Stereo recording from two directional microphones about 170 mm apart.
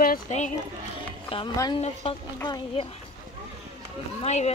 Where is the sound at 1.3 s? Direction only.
25° left (ahead or behind).